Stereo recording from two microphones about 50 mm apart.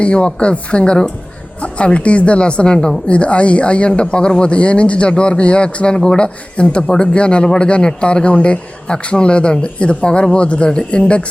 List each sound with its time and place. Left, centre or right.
0.0 s speech: left